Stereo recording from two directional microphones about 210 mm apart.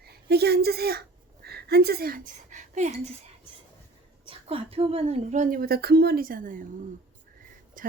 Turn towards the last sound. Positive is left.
turn(degrees=-40)  # may be behind; listen again after turning